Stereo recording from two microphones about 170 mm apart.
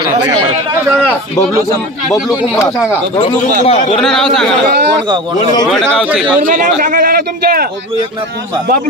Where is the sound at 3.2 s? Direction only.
35° left (ahead or behind).